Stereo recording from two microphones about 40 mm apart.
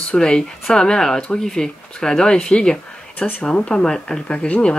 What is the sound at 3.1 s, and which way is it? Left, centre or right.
Speech, left.